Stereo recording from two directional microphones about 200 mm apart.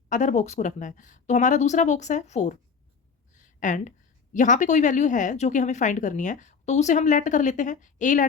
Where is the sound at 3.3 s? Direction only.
40° left (ahead or behind).